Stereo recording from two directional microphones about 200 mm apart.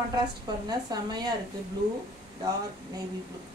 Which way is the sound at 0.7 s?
20° right (ahead or behind).